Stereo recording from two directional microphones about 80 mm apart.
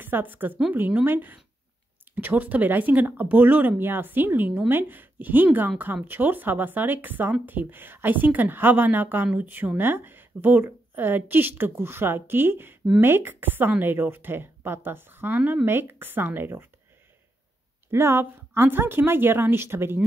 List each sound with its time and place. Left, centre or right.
0.0 s a woman's voice: right
17.9 s a woman's voice: right